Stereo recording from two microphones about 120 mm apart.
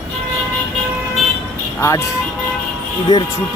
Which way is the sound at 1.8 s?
20° left (ahead or behind).